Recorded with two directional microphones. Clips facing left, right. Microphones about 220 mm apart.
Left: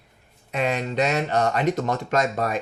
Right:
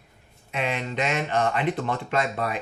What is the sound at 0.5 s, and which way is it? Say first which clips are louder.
Speech: left 4 dB; 40° left (ahead or behind).